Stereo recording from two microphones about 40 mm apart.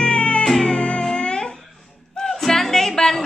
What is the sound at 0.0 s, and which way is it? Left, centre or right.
Music, left.